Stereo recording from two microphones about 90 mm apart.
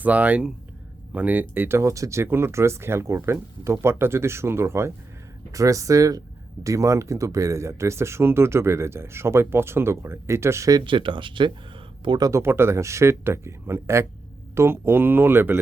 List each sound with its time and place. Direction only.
0.0 s speech: 15° right (ahead or behind)
10.8 s speech: 65° right (ahead or behind)
12.0 s speech: 55° right (ahead or behind)
12.3 s speech: 30° right (ahead or behind)